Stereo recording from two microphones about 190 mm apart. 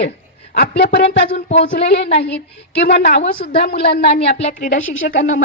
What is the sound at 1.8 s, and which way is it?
A woman's voice, 60° left (ahead or behind).